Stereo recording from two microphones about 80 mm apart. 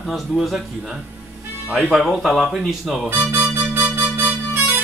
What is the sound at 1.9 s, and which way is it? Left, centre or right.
Speech, centre.